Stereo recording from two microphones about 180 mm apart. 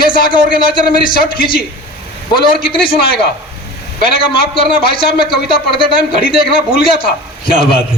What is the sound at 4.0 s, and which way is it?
A man's voice, 30° left (ahead or behind).